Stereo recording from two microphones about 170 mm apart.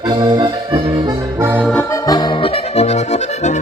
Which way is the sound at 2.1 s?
25° left (ahead or behind).